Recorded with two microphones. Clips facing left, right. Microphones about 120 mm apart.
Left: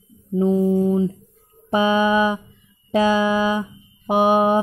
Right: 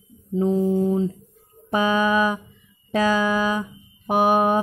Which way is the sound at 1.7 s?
25° left (ahead or behind).